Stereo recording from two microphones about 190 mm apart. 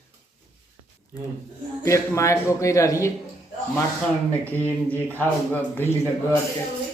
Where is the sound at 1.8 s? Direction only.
15° left (ahead or behind).